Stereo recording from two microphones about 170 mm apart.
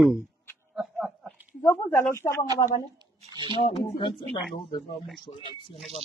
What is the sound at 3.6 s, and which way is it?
Speech, 30° left (ahead or behind).